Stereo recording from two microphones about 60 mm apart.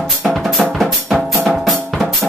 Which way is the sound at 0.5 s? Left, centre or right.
Centre.